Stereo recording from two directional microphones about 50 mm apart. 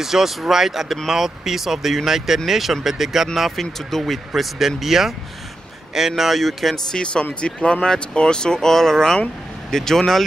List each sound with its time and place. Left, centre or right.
0.0 s speech: centre
6.9 s speech: centre